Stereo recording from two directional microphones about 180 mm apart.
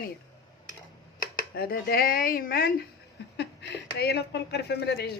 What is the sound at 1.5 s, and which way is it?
A woman's voice, 60° left (ahead or behind).